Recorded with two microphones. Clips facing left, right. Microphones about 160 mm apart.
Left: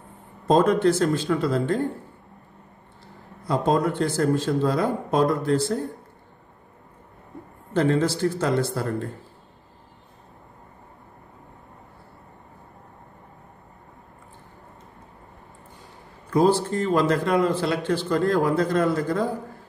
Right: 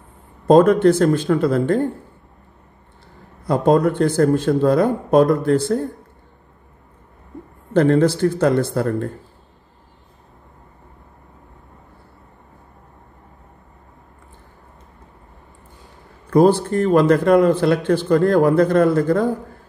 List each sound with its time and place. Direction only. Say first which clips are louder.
0.5 s speech: right 7 dB; 55° right (ahead or behind)
3.4 s speech: right 6 dB; 55° right (ahead or behind)
7.7 s speech: right 7 dB; 55° right (ahead or behind)
16.3 s speech: right 6 dB; 55° right (ahead or behind)